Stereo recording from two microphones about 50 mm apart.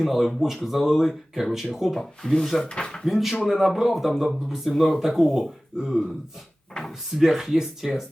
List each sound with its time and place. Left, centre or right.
0.0 s speech: centre
2.0 s speech: centre
3.0 s speech: centre
6.8 s speech: centre
7.2 s speech: centre